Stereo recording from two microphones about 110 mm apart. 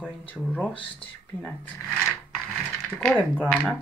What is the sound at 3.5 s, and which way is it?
Speech, 15° left (ahead or behind).